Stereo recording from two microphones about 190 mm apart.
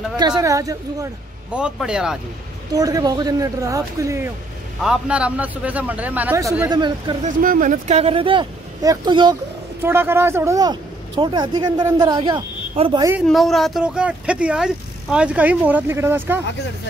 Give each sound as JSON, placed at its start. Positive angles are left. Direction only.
{"t": 0.4, "sound": "speech", "side_deg": -15}
{"t": 1.5, "sound": "speech", "side_deg": -5}
{"t": 2.7, "sound": "speech", "side_deg": -20}
{"t": 4.8, "sound": "speech", "side_deg": -5}
{"t": 7.2, "sound": "speech", "side_deg": -45}
{"t": 9.8, "sound": "speech", "side_deg": -10}
{"t": 13.3, "sound": "speech", "side_deg": 0}